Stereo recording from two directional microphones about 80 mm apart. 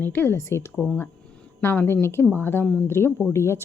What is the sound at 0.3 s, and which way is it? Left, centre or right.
Speech, left.